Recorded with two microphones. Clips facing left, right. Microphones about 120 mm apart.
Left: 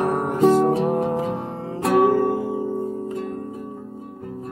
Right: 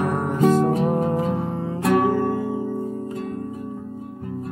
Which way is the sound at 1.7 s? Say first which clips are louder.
Left 3 dB; 35° left (ahead or behind).